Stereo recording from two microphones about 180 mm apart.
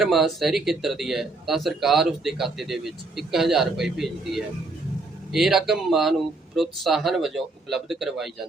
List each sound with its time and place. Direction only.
0.0 s a man's voice: centre (ahead or behind)